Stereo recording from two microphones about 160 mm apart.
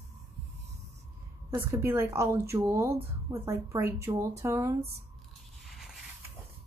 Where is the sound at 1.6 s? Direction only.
15° right (ahead or behind).